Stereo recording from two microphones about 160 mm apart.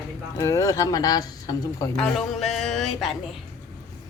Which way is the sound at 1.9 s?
Centre (ahead or behind).